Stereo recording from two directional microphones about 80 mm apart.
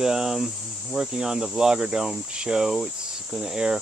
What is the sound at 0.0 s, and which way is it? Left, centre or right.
Speech, centre.